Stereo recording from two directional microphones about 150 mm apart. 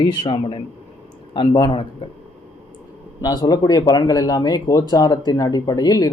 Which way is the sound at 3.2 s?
25° left (ahead or behind).